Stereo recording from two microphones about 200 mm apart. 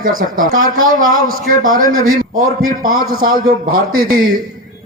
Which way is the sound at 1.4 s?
45° right (ahead or behind).